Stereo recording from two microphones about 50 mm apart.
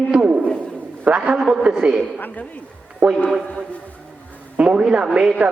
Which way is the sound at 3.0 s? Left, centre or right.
Right.